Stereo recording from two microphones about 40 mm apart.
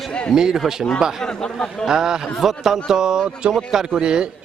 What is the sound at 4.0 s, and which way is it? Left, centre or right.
Speech, right.